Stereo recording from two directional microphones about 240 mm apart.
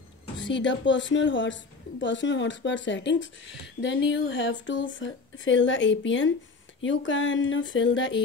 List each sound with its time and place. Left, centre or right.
0.4 s a woman's voice: left